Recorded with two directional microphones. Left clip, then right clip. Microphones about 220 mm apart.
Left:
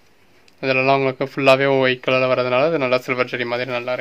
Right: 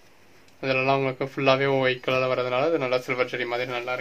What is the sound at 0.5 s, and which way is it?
Speech, 45° left (ahead or behind).